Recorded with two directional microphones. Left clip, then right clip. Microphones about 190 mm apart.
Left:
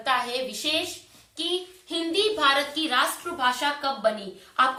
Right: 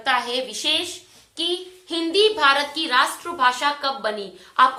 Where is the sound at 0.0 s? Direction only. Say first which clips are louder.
Right 3 dB; 35° right (ahead or behind).